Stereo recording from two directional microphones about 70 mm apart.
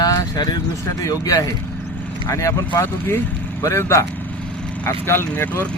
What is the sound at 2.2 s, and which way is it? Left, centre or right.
Speech, left.